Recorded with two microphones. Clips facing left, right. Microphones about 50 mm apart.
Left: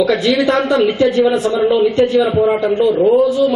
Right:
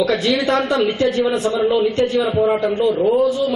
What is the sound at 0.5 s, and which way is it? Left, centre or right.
A man's voice, centre.